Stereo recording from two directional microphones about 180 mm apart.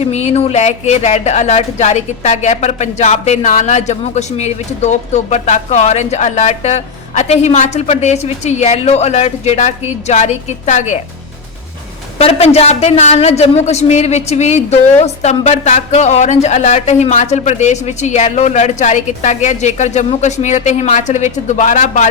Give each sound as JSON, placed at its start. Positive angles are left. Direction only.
{"t": 0.0, "sound": "speech", "side_deg": 40}
{"t": 12.2, "sound": "speech", "side_deg": 35}